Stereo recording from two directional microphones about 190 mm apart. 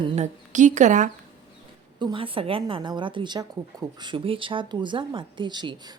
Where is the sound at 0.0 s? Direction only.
40° right (ahead or behind).